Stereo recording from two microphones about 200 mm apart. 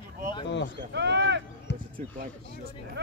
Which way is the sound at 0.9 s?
60° right (ahead or behind).